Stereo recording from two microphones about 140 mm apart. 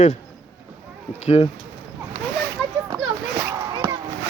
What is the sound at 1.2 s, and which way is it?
Speech, 50° left (ahead or behind).